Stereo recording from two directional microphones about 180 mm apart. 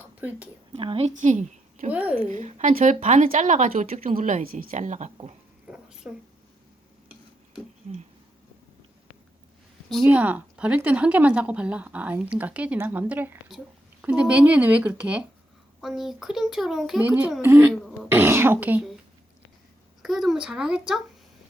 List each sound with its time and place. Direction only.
0.0 s a sound: 10° right (ahead or behind)
0.7 s a woman's voice: 30° right (ahead or behind)
1.9 s speech: 10° right (ahead or behind)
2.3 s a woman's voice: 45° right (ahead or behind)
5.6 s a sound: 5° right (ahead or behind)
9.9 s a child's voice: 5° right (ahead or behind)
20.0 s a child's voice: centre (ahead or behind)